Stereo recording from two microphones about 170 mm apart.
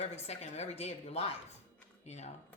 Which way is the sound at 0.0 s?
40° left (ahead or behind).